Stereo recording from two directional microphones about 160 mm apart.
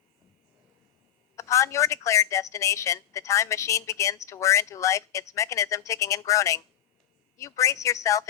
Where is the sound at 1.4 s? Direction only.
20° left (ahead or behind).